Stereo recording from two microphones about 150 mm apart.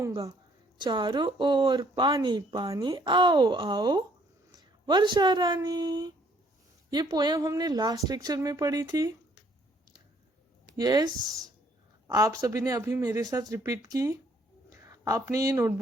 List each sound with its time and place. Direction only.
0.1 s speech: 25° right (ahead or behind)
10.8 s speech: 25° right (ahead or behind)